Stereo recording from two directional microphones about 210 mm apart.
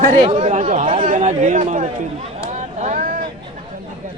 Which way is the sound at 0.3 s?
35° right (ahead or behind).